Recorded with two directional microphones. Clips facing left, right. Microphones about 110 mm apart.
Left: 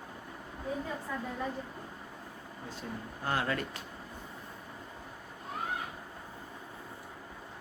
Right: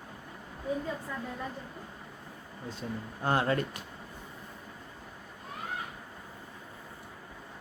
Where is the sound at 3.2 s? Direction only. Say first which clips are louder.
Right 5 dB; 30° right (ahead or behind).